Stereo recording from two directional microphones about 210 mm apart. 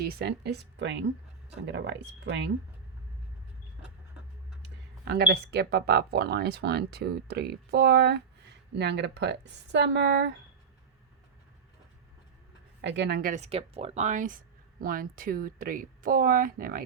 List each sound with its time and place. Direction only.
0.0 s speech: 45° right (ahead or behind)
5.0 s speech: 50° right (ahead or behind)
12.8 s speech: 55° right (ahead or behind)